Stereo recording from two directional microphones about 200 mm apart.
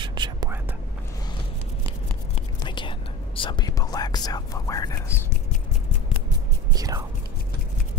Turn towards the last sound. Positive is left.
turn(degrees=-15)  # may be behind; listen again after turning